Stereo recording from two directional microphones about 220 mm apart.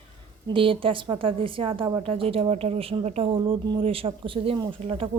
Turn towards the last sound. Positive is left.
turn(degrees=-25)  # may be behind; listen again after turning